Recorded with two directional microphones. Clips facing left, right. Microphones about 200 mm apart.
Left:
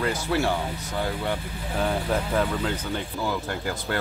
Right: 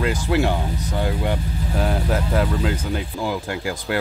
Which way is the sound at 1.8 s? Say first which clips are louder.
Right 2 dB; 5° right (ahead or behind).